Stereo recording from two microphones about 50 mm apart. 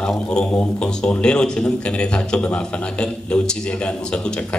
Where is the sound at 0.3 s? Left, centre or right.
Centre.